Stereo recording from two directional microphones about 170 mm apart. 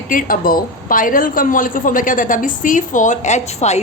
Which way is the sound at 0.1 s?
55° left (ahead or behind).